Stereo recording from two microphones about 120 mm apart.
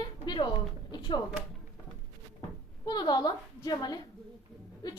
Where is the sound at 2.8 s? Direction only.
35° left (ahead or behind).